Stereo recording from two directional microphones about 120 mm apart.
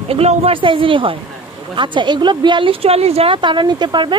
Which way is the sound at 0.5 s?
45° right (ahead or behind).